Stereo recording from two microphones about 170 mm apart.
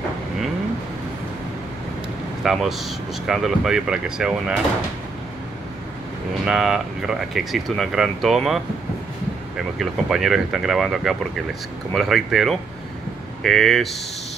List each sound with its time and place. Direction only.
2.4 s speech: centre (ahead or behind)
6.4 s speech: 5° right (ahead or behind)
9.8 s speech: centre (ahead or behind)